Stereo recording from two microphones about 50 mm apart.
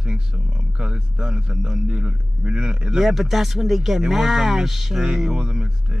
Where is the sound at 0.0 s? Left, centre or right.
Centre.